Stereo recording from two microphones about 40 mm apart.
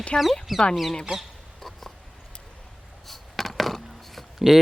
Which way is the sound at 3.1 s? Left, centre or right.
Centre.